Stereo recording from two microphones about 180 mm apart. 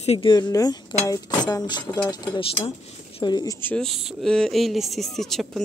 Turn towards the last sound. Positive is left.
turn(degrees=0)  # may be behind; listen again after turning